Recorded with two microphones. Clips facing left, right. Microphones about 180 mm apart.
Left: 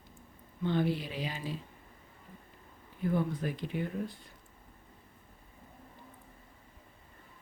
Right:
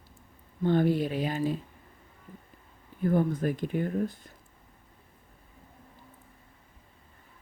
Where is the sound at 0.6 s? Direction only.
45° right (ahead or behind).